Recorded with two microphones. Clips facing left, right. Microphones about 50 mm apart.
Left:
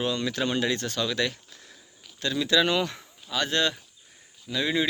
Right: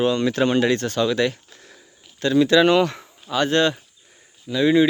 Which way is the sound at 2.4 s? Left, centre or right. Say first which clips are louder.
Right 6 dB; right.